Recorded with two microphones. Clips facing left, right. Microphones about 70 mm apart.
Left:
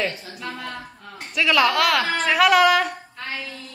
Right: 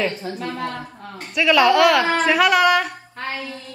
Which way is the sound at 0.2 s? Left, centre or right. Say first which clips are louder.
Right 8 dB; right.